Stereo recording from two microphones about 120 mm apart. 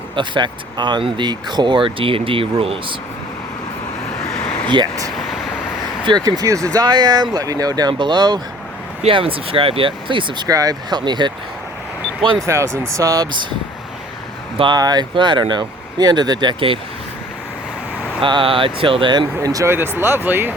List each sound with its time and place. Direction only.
0.2 s speech: 40° right (ahead or behind)
4.4 s vehicle: 10° left (ahead or behind)
4.7 s speech: 35° right (ahead or behind)
5.1 s vehicle: centre (ahead or behind)
6.1 s speech: 35° right (ahead or behind)
9.0 s speech: 50° right (ahead or behind)
12.5 s speech: 25° right (ahead or behind)
14.6 s speech: 35° right (ahead or behind)
18.2 s speech: 45° right (ahead or behind)
19.4 s speech: 30° right (ahead or behind)
19.7 s speech: 20° right (ahead or behind)